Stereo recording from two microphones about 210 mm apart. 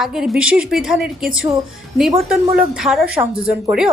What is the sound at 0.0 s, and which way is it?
Speech, centre (ahead or behind).